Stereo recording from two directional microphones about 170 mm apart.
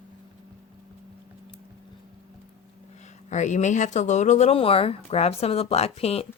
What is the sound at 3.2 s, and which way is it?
A woman's voice, 45° left (ahead or behind).